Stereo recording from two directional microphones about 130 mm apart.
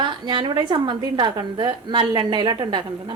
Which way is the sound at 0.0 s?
35° right (ahead or behind).